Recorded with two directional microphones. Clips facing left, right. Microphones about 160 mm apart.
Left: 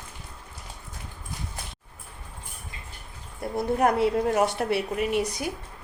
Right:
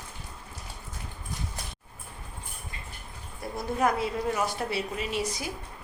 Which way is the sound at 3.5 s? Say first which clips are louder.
Left 4 dB; 60° left (ahead or behind).